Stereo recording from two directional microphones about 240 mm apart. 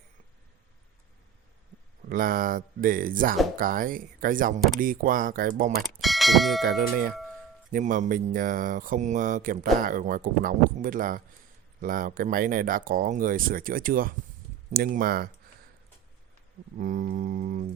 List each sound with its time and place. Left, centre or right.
2.0 s speech: right
5.8 s speech: centre
7.7 s speech: right
16.7 s speech: right